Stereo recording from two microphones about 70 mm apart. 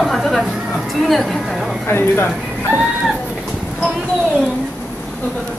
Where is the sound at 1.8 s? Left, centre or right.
Left.